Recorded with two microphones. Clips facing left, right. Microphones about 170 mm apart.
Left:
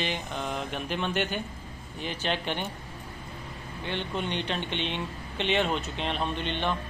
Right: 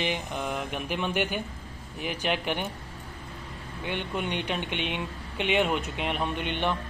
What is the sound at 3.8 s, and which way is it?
Speech, 10° right (ahead or behind).